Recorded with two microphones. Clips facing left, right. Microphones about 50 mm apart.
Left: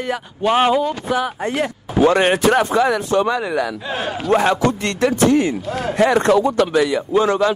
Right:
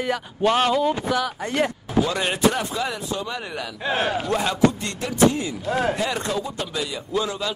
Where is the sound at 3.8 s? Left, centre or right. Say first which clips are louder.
Right 1 dB; right.